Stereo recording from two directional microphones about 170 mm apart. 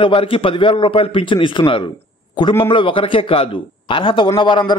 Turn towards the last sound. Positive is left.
turn(degrees=25)  # may be behind; listen again after turning